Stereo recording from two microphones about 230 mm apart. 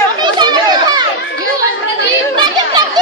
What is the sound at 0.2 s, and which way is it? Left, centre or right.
Chatter, centre.